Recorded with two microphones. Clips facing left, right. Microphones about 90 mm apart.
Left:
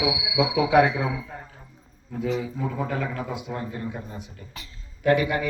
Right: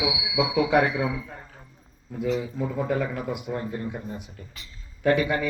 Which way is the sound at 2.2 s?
5° right (ahead or behind).